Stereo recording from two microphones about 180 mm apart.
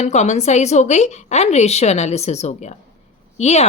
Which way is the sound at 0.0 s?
40° left (ahead or behind).